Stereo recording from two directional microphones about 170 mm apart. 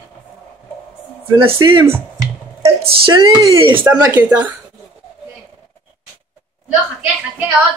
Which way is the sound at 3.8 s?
10° right (ahead or behind).